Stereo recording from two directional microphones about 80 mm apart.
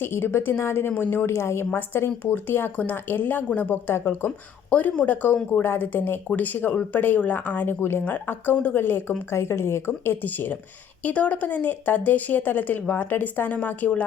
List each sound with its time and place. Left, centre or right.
0.0 s speech: left
1.3 s speech: left